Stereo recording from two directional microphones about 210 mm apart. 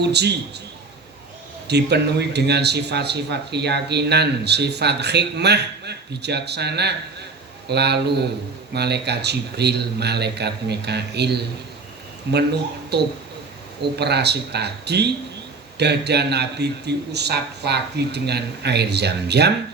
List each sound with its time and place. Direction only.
0.0 s a man's voice: 55° right (ahead or behind)
1.6 s a man's voice: 50° right (ahead or behind)